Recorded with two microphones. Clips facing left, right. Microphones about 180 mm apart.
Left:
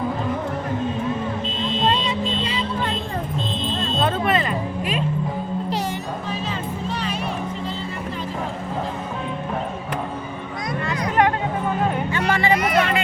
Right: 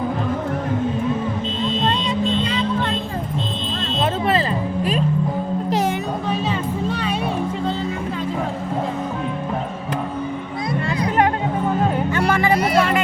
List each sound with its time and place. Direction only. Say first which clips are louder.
1.9 s vehicle: right 2 dB; 5° left (ahead or behind)
4.0 s music: right 2 dB; 30° right (ahead or behind)
5.7 s music: right 7 dB; 50° right (ahead or behind)
6.2 s music: right 7 dB; 65° right (ahead or behind)
10.7 s music: right 3 dB; 30° right (ahead or behind)
12.1 s music: right 2 dB; 45° right (ahead or behind)